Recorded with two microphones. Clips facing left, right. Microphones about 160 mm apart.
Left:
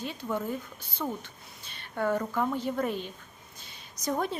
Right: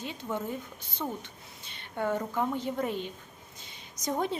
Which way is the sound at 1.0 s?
10° right (ahead or behind).